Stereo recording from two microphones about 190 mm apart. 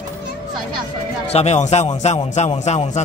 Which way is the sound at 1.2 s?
35° left (ahead or behind).